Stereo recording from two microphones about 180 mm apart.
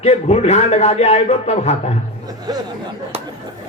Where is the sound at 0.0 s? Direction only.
35° left (ahead or behind).